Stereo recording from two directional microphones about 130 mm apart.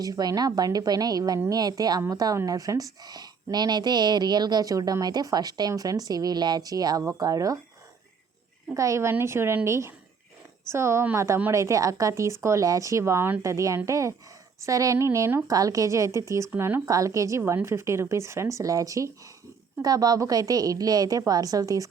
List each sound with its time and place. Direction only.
0.0 s speech: 30° right (ahead or behind)
8.7 s speech: 25° right (ahead or behind)